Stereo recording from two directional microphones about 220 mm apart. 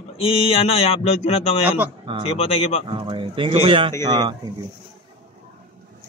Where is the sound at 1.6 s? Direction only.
10° right (ahead or behind).